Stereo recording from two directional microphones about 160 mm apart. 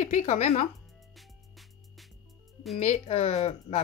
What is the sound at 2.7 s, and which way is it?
Speech, 40° left (ahead or behind).